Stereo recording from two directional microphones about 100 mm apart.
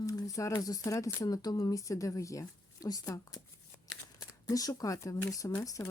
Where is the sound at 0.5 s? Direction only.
40° left (ahead or behind).